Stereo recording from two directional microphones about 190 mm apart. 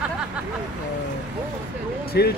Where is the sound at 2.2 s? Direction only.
60° left (ahead or behind).